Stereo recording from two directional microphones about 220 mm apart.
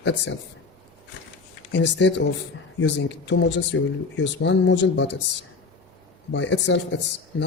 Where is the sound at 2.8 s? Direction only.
55° left (ahead or behind).